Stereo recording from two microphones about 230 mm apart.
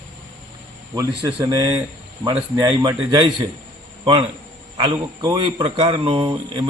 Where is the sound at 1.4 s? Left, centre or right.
Centre.